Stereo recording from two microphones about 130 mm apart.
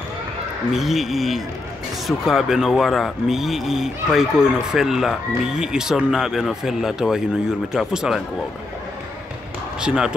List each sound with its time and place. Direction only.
0.7 s speech: centre (ahead or behind)
9.8 s speech: 5° right (ahead or behind)